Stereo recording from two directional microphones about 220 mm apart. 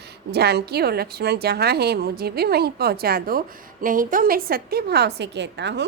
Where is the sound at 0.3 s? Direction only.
45° right (ahead or behind).